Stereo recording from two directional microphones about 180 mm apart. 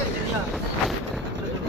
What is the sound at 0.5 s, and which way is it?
Vehicle, centre (ahead or behind).